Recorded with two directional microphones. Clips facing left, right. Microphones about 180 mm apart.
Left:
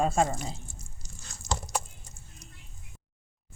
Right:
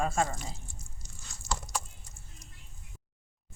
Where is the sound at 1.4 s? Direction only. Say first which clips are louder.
Left 3 dB; 15° left (ahead or behind).